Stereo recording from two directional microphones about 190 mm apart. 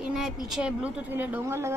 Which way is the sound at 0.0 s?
Centre (ahead or behind).